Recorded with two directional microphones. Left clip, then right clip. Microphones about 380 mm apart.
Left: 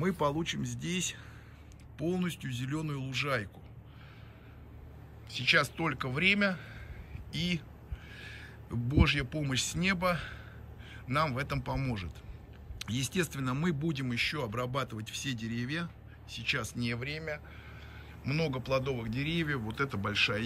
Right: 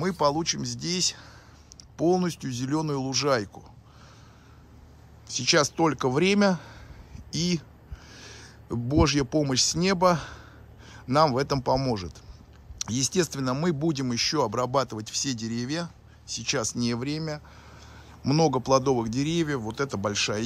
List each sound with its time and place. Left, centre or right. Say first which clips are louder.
0.0 s speech: right 7 dB; centre
2.7 s a man's voice: right 11 dB; centre
5.3 s a man's voice: right 4 dB; centre